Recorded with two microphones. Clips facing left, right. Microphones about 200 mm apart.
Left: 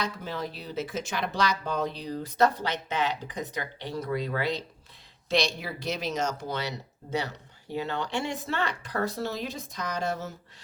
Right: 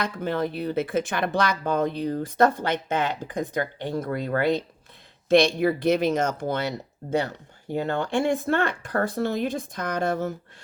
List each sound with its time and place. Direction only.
0.0 s speech: 55° right (ahead or behind)